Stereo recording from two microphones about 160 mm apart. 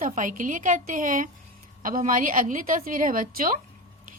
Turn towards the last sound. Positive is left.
turn(degrees=-60)  # may be behind; listen again after turning